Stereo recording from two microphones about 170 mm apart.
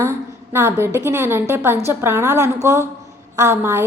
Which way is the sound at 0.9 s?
15° right (ahead or behind).